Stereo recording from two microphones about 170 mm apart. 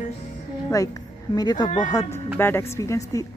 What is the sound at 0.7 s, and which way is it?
Speech, 20° left (ahead or behind).